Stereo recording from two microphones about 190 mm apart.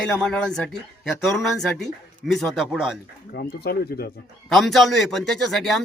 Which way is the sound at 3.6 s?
55° left (ahead or behind).